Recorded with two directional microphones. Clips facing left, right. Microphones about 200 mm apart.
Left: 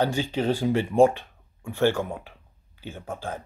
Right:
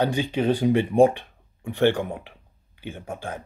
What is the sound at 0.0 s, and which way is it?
Speech, 15° right (ahead or behind).